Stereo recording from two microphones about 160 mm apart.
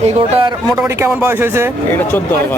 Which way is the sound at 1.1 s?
10° right (ahead or behind).